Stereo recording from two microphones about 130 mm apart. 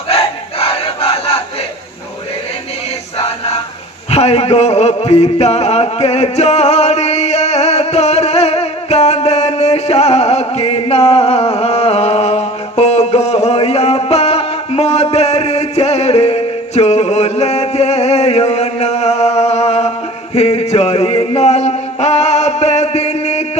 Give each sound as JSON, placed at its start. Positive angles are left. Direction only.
{"t": 4.1, "sound": "music", "side_deg": 50}